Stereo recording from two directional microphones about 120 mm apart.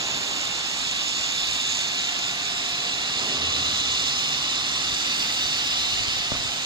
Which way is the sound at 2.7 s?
40° right (ahead or behind).